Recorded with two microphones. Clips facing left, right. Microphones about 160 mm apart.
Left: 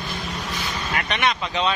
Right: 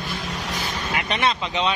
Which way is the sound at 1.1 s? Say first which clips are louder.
Right 1 dB; 30° right (ahead or behind).